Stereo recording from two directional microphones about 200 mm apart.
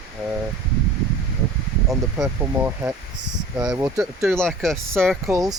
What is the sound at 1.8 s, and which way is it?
Speech, 10° right (ahead or behind).